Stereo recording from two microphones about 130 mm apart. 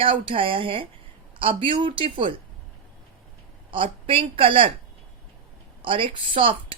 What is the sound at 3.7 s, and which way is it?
Speech, 40° right (ahead or behind).